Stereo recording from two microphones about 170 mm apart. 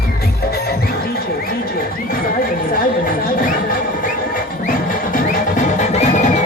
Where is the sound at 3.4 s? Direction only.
55° left (ahead or behind).